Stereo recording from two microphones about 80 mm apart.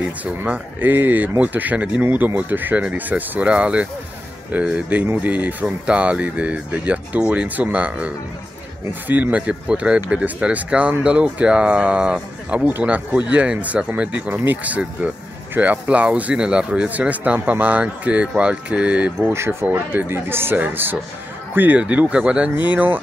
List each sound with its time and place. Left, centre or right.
0.2 s speech: right
19.2 s speech: right